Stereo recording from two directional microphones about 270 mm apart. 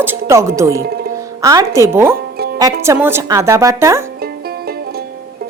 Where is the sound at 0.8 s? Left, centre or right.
Right.